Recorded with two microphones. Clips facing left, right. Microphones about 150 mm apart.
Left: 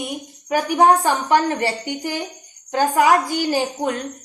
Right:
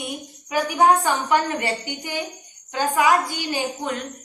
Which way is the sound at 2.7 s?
45° left (ahead or behind).